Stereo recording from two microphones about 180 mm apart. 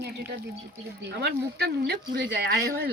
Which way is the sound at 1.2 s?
65° right (ahead or behind).